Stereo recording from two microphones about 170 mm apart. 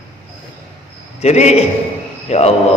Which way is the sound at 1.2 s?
40° left (ahead or behind).